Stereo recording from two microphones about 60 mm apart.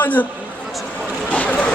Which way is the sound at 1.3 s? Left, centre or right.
Left.